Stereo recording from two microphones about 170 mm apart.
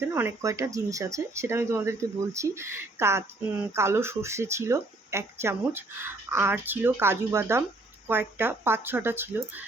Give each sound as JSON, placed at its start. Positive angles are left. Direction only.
{"t": 0.1, "sound": "speech", "side_deg": -15}